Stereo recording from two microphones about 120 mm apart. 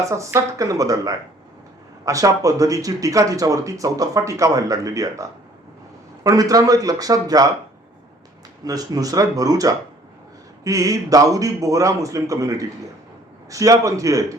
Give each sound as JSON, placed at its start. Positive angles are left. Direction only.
{"t": 0.0, "sound": "speech", "side_deg": -25}
{"t": 8.6, "sound": "speech", "side_deg": -30}